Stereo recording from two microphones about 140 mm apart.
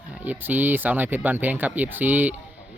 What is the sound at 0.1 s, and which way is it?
Speech, 10° right (ahead or behind).